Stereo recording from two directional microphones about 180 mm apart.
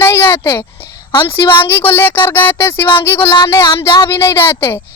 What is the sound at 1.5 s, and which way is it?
A woman's voice, 10° left (ahead or behind).